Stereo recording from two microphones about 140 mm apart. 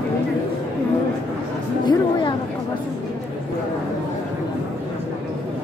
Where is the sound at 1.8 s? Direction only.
35° left (ahead or behind).